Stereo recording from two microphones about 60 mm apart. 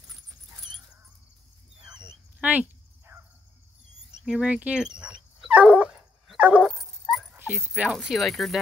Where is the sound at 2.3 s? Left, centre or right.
Right.